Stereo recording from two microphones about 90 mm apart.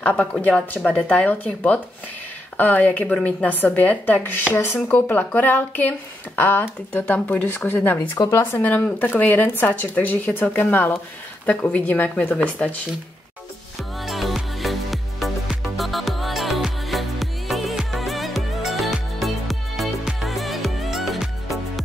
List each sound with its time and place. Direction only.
0.0 s speech: 10° left (ahead or behind)
3.4 s speech: 20° left (ahead or behind)
14.0 s music: centre (ahead or behind)